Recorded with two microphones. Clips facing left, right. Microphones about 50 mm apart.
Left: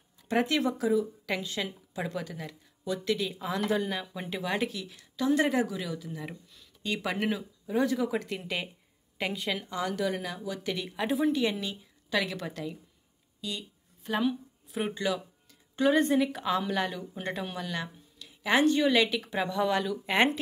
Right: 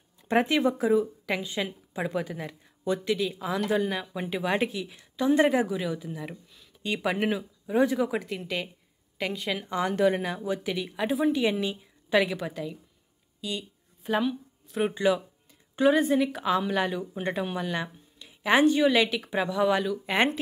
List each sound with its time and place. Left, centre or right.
0.4 s a woman's voice: centre
1.0 s a woman's voice: centre
3.1 s a woman's voice: centre; by 5.5 s right
5.5 s a woman's voice: centre
6.1 s a woman's voice: centre
8.1 s speech: centre
9.7 s a woman's voice: right
10.6 s a woman's voice: centre
13.4 s a sound: centre
15.0 s a woman's voice: centre
15.7 s a woman's voice: centre